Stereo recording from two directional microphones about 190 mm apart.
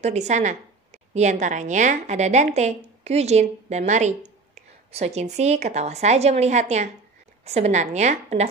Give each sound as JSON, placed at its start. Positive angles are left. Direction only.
{"t": 0.0, "sound": "a woman's voice", "side_deg": -35}